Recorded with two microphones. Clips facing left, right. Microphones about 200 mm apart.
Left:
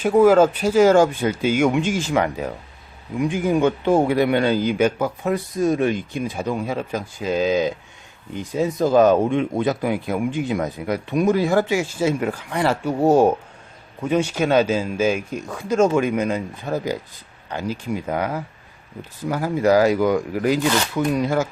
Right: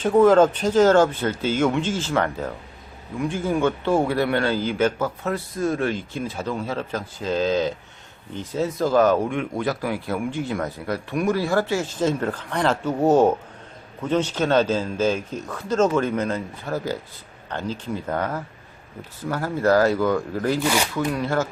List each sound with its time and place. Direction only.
0.0 s speech: 10° left (ahead or behind)